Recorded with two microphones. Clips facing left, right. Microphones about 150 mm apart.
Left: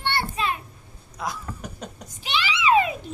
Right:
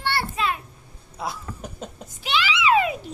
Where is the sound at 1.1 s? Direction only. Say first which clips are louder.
Even; 30° right (ahead or behind).